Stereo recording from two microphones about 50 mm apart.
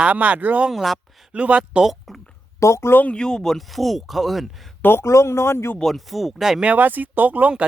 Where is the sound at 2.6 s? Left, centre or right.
Left.